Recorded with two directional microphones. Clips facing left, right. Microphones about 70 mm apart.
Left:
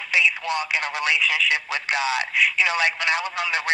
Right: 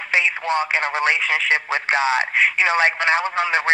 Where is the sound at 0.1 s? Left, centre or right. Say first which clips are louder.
Right 2 dB; right.